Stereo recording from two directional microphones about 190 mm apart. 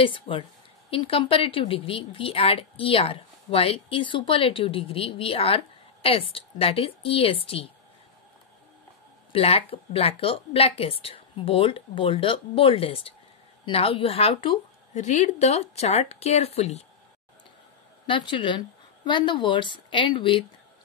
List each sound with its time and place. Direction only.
0.0 s a woman's voice: 30° left (ahead or behind)
9.3 s a woman's voice: 30° left (ahead or behind)
15.0 s speech: 40° left (ahead or behind)
18.0 s a woman's voice: 25° left (ahead or behind)